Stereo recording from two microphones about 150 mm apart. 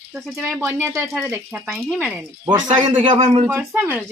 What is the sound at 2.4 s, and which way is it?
Speech, 25° right (ahead or behind).